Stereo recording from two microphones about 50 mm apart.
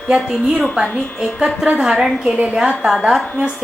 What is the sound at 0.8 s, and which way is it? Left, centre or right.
A woman's voice, right.